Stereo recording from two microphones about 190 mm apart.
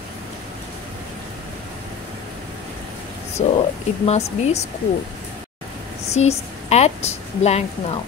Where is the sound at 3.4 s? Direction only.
30° left (ahead or behind).